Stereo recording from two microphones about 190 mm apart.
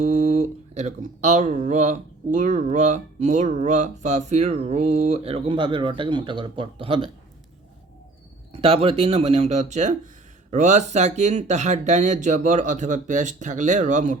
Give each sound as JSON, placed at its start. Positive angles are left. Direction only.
{"t": 0.0, "sound": "speech", "side_deg": -40}
{"t": 8.5, "sound": "speech", "side_deg": -30}